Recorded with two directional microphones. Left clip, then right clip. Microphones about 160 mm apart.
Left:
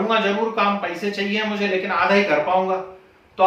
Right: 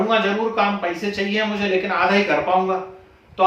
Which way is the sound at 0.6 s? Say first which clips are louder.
Even; 15° right (ahead or behind).